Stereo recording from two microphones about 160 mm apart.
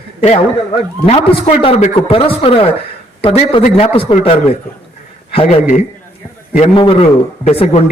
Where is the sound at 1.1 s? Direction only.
40° left (ahead or behind).